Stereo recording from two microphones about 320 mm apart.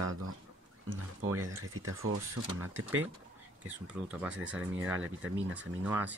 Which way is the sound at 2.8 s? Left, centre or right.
Centre.